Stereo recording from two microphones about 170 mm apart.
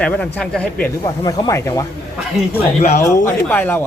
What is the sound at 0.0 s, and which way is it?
Speech, 10° left (ahead or behind).